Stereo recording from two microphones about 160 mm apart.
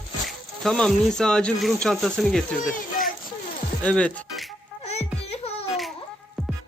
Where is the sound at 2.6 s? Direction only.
60° left (ahead or behind).